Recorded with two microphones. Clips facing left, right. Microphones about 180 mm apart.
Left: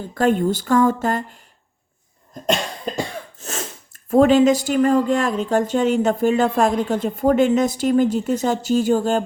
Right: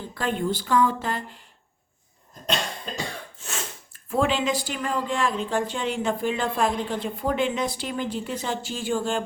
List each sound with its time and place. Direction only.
0.1 s speech: 45° left (ahead or behind)
3.3 s speech: 40° left (ahead or behind)